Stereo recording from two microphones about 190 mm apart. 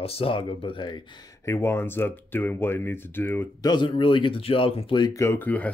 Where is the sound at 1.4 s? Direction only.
15° left (ahead or behind).